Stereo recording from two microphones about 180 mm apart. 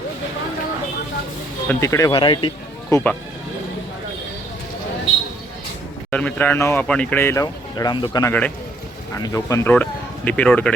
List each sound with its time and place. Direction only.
1.6 s speech: 15° left (ahead or behind)
2.9 s speech: 10° left (ahead or behind)
6.1 s speech: 10° left (ahead or behind)
8.3 s speech: 5° left (ahead or behind)
9.1 s speech: 20° left (ahead or behind)